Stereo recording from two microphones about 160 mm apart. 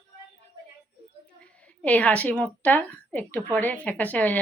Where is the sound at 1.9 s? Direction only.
10° left (ahead or behind).